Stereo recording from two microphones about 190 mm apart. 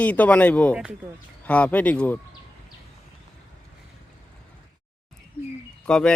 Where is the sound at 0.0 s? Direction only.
5° left (ahead or behind).